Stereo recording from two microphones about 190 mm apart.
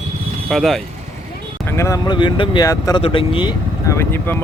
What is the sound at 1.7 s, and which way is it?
Speech, 15° left (ahead or behind).